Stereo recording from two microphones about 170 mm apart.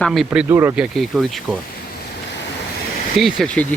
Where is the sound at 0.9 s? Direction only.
Centre (ahead or behind).